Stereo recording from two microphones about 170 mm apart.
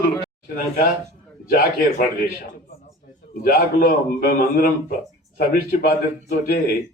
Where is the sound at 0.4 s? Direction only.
60° left (ahead or behind).